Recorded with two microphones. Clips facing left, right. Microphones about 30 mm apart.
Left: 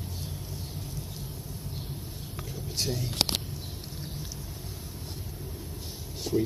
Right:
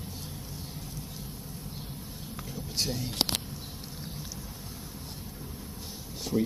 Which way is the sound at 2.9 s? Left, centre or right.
Centre.